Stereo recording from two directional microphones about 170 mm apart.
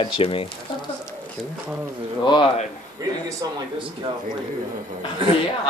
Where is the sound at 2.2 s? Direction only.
25° left (ahead or behind).